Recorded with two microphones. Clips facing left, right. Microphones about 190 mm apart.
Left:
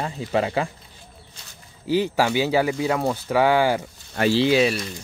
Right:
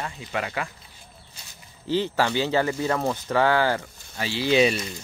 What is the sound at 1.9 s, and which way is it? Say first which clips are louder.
Speech: left 3 dB; 10° left (ahead or behind).